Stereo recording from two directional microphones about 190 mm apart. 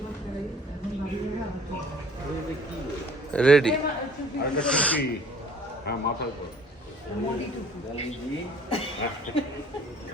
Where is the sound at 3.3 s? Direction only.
5° left (ahead or behind).